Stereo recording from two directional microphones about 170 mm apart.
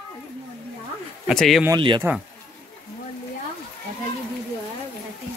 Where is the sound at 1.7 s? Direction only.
30° right (ahead or behind).